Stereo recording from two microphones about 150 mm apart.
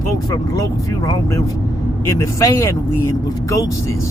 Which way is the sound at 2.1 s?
20° left (ahead or behind).